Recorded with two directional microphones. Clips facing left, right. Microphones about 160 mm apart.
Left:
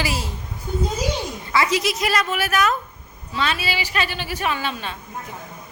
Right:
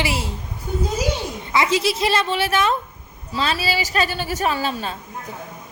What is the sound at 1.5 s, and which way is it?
A woman's voice, 25° right (ahead or behind).